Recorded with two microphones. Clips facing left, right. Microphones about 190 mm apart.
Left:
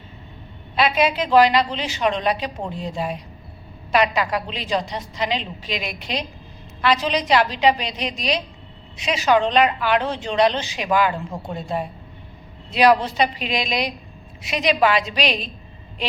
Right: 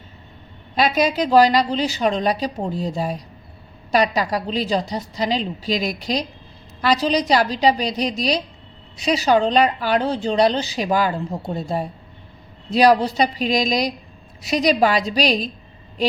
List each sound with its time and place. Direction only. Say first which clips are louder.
0.8 s speech: right 1 dB; 40° right (ahead or behind)